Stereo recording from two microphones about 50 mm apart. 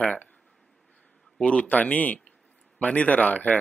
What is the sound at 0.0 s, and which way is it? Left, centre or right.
Speech, left.